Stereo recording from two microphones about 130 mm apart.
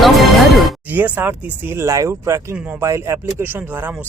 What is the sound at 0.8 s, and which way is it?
Speech, 15° right (ahead or behind).